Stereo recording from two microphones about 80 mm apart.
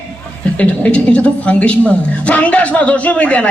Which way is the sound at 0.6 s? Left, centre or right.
Centre.